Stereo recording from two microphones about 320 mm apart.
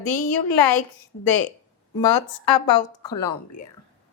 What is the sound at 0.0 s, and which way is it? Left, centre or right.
Speech, left.